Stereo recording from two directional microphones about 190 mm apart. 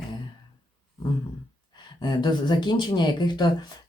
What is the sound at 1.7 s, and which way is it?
Speech, 25° left (ahead or behind).